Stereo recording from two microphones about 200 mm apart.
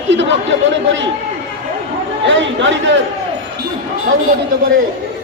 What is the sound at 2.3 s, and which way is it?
Speech, 65° right (ahead or behind).